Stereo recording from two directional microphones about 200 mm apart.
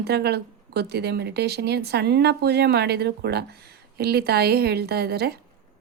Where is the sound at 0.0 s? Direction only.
55° right (ahead or behind).